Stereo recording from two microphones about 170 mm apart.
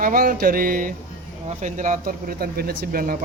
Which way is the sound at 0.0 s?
55° right (ahead or behind).